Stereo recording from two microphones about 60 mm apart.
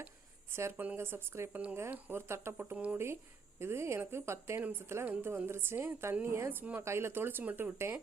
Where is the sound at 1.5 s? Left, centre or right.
Right.